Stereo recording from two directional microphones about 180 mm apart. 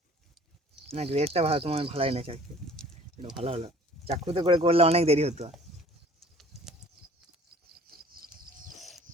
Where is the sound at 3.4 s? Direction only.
35° right (ahead or behind).